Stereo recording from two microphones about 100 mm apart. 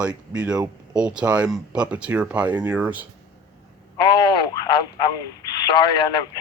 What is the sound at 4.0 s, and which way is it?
Speech, 50° left (ahead or behind).